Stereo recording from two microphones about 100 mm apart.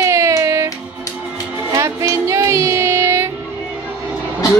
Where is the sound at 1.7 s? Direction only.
30° right (ahead or behind).